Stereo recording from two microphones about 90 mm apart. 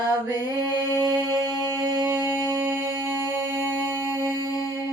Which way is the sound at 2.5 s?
25° right (ahead or behind).